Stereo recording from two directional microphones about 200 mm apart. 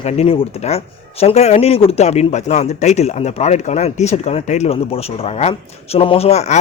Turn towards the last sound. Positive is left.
turn(degrees=35)  # may be behind; listen again after turning